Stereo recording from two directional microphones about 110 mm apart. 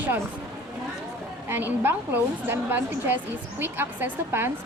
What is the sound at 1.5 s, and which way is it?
A woman's voice, 20° right (ahead or behind).